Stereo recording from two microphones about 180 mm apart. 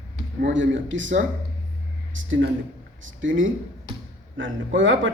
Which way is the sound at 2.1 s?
90° right.